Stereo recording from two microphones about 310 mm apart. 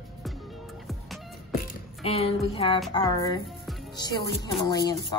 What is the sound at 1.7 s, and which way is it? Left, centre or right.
Speech, centre.